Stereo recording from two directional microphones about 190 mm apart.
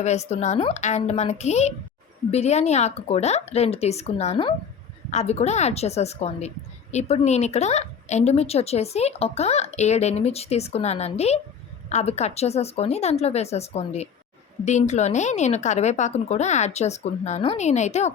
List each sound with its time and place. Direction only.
0.0 s a woman's voice: 35° left (ahead or behind)